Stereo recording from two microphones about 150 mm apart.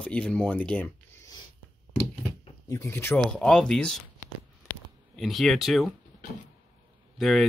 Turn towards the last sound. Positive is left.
turn(degrees=0)  # may be behind; listen again after turning